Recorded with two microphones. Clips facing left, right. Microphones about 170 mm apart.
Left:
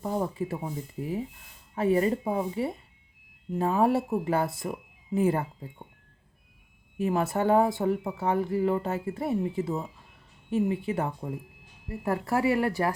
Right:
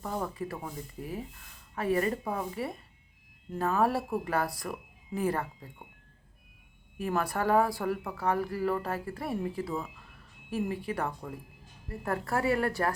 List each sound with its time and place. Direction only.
0.0 s speech: 25° left (ahead or behind)
7.0 s speech: 25° left (ahead or behind)